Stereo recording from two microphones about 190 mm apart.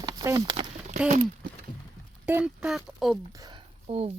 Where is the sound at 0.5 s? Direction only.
30° right (ahead or behind).